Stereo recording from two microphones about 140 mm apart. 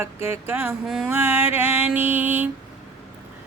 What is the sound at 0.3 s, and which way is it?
Speech, 15° right (ahead or behind).